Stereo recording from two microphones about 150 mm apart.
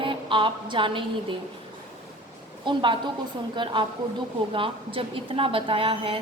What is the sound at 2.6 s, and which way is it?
A woman's voice, 35° right (ahead or behind).